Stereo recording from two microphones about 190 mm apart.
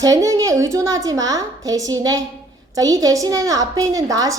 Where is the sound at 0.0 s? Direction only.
15° right (ahead or behind).